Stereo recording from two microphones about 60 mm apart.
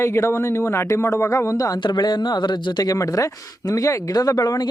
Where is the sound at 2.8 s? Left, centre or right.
Left.